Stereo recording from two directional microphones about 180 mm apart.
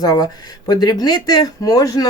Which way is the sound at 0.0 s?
20° left (ahead or behind).